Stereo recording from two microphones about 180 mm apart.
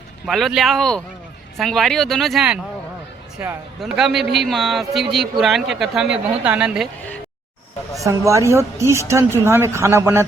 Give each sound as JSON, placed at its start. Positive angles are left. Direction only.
{"t": 0.3, "sound": "speech", "side_deg": 0}
{"t": 8.0, "sound": "speech", "side_deg": -15}